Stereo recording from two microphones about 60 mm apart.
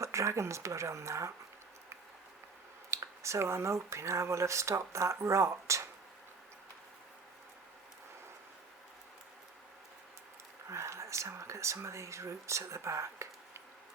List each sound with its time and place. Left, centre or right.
0.0 s speech: right
2.9 s speech: right
10.7 s speech: right